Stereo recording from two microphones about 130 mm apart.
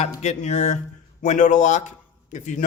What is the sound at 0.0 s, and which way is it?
A man's voice, 60° left (ahead or behind).